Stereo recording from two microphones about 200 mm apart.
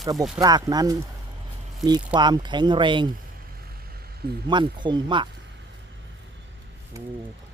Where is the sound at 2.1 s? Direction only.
20° right (ahead or behind).